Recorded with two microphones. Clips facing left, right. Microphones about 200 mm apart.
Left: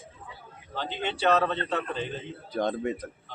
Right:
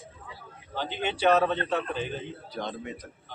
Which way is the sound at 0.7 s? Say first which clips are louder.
Right 1 dB; 10° right (ahead or behind).